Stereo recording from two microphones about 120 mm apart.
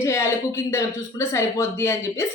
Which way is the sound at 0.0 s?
20° left (ahead or behind).